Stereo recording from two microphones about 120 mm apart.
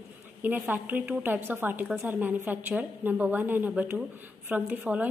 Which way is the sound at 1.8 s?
5° right (ahead or behind).